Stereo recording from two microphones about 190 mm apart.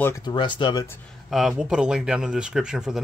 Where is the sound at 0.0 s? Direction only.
20° left (ahead or behind).